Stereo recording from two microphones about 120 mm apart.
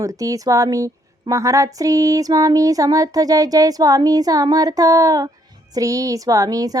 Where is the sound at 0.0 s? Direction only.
30° right (ahead or behind).